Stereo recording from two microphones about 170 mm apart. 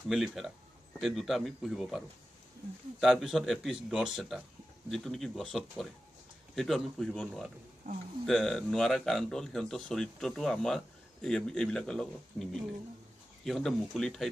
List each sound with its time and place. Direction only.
0.1 s speech: centre (ahead or behind)
7.8 s speech: 50° right (ahead or behind)
8.3 s speech: centre (ahead or behind)